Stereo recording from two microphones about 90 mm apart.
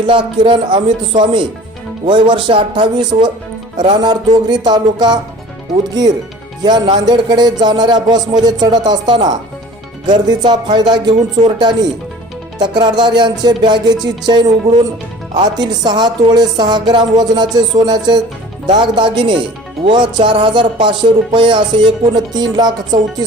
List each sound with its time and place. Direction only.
0.0 s speech: 60° right (ahead or behind)
12.7 s speech: 55° right (ahead or behind)